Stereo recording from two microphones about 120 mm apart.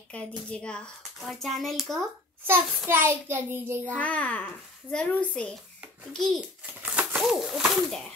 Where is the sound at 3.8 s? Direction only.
10° left (ahead or behind).